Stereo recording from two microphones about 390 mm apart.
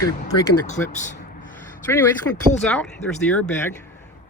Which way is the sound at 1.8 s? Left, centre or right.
Centre.